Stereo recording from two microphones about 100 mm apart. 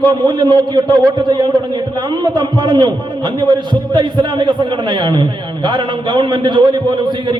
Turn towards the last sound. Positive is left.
turn(degrees=-50)  # may be behind; listen again after turning